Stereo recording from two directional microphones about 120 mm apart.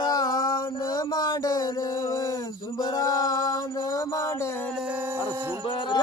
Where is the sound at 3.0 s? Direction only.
30° left (ahead or behind).